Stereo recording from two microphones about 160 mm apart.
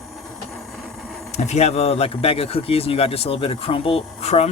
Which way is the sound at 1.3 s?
45° left (ahead or behind).